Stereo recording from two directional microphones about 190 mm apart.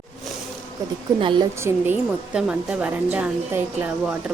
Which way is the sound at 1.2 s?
25° right (ahead or behind).